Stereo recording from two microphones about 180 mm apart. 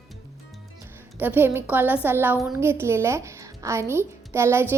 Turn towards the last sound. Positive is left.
turn(degrees=-15)  # may be behind; listen again after turning